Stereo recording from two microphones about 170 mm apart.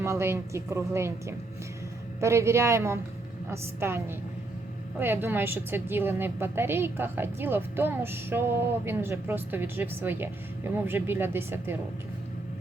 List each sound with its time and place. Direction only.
0.0 s a woman's voice: 15° right (ahead or behind)